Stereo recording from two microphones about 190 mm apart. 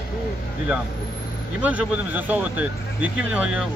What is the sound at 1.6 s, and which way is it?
Speech, 10° right (ahead or behind).